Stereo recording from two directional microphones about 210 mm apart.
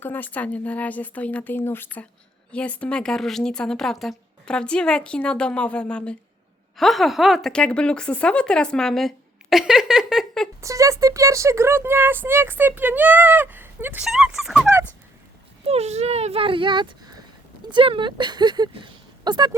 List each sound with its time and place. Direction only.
0.0 s a woman's voice: 10° left (ahead or behind)
10.6 s speech: 15° right (ahead or behind)
15.6 s speech: 30° right (ahead or behind)